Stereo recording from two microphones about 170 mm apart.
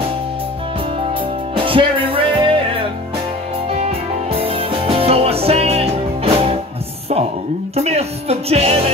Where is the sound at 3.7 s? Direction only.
35° right (ahead or behind).